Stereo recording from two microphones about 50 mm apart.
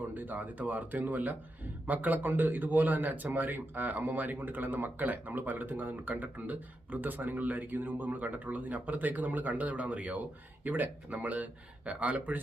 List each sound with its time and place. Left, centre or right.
0.1 s speech: right